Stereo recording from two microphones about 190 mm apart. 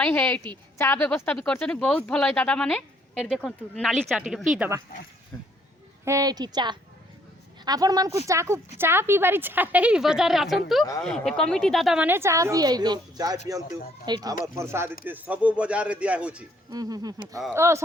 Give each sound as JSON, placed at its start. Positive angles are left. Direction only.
{"t": 0.0, "sound": "a woman's voice", "side_deg": 10}
{"t": 5.3, "sound": "a sound", "side_deg": 10}
{"t": 6.1, "sound": "a woman's voice", "side_deg": -20}
{"t": 16.7, "sound": "a woman's voice", "side_deg": -20}